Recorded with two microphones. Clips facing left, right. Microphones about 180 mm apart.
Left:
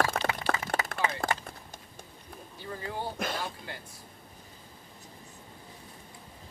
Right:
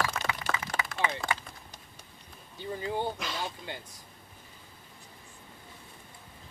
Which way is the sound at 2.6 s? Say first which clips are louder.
Right 4 dB; 20° right (ahead or behind).